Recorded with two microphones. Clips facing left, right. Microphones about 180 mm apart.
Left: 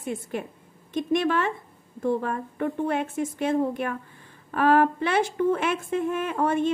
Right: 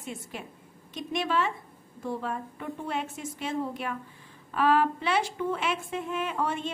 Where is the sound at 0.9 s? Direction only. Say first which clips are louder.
Left 5 dB; 55° left (ahead or behind).